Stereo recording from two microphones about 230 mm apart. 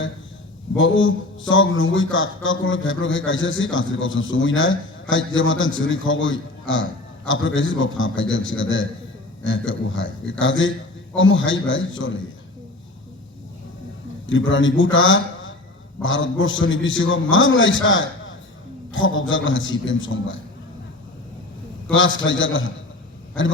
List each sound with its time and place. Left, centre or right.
0.8 s a man's voice: left
14.3 s a man's voice: left
21.8 s a man's voice: left